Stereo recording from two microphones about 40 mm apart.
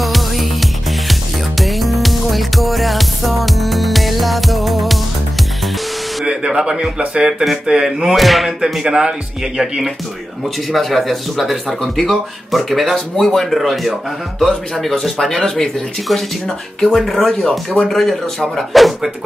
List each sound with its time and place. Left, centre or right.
0.0 s music: centre
6.2 s music: right
7.2 s speech: centre
8.2 s speech: centre
8.8 s speech: centre
9.6 s speech: centre
10.7 s speech: centre
13.6 s speech: centre
17.0 s speech: centre